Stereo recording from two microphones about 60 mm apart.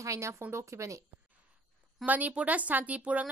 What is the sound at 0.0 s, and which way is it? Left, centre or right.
Speech, right.